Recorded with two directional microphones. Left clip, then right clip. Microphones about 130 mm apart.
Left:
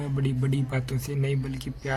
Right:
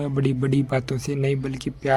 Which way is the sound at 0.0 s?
45° right (ahead or behind).